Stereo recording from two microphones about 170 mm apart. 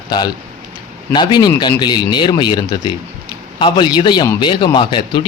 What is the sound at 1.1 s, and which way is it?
A man's voice, 25° left (ahead or behind).